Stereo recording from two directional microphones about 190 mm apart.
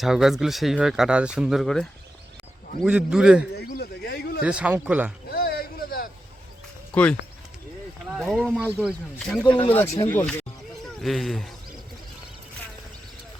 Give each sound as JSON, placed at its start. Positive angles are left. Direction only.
{"t": 0.0, "sound": "speech", "side_deg": 0}
{"t": 3.5, "sound": "a sound", "side_deg": 55}
{"t": 4.4, "sound": "speech", "side_deg": -5}
{"t": 5.3, "sound": "a sound", "side_deg": 50}
{"t": 6.9, "sound": "speech", "side_deg": 5}
{"t": 8.9, "sound": "speech", "side_deg": 5}
{"t": 9.5, "sound": "speech", "side_deg": 30}
{"t": 9.7, "sound": "speech", "side_deg": 10}
{"t": 11.0, "sound": "speech", "side_deg": 0}